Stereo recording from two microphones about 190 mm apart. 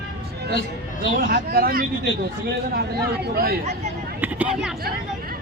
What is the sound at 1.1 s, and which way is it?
A man's voice, 50° right (ahead or behind).